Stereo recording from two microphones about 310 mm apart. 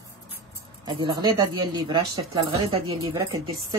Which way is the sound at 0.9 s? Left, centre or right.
Centre.